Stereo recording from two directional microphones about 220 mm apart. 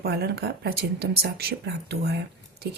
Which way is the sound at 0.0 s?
45° right (ahead or behind).